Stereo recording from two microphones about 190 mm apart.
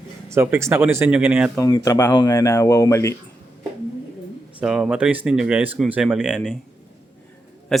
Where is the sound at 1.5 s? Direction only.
15° left (ahead or behind).